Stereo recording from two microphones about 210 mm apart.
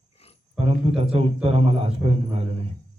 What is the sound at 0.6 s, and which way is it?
A man's voice, 30° right (ahead or behind).